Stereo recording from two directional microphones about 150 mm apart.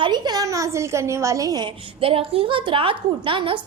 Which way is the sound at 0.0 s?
30° right (ahead or behind).